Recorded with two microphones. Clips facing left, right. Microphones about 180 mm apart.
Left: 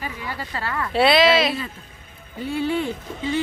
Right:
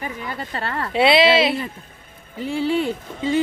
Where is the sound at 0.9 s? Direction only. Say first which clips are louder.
Right 1 dB; 25° right (ahead or behind).